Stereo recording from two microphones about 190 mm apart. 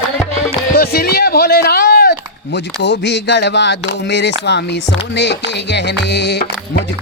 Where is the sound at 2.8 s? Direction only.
60° left (ahead or behind).